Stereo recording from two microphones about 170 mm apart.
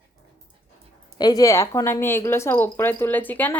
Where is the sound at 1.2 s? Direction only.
20° left (ahead or behind).